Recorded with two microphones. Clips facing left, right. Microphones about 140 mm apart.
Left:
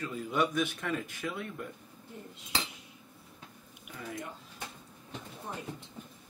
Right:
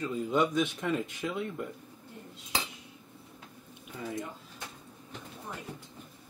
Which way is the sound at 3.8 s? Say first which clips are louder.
Right 4 dB; 25° right (ahead or behind).